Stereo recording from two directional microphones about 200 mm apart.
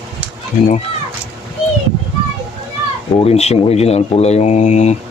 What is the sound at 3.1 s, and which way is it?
Speech, 30° left (ahead or behind).